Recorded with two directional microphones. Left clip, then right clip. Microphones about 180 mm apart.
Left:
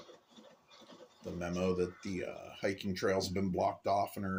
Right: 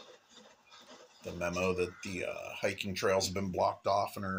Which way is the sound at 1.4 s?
30° left (ahead or behind).